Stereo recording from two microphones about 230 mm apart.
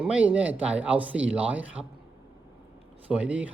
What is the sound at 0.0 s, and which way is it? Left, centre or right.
A man's voice, centre.